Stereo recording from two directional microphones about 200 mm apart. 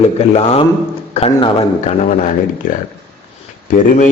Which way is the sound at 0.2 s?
30° left (ahead or behind).